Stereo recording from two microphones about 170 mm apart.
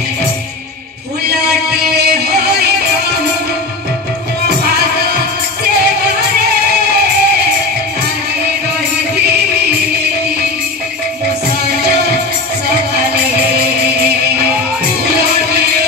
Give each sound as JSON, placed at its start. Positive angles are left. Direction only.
{"t": 1.5, "sound": "music", "side_deg": -70}
{"t": 4.6, "sound": "music", "side_deg": -70}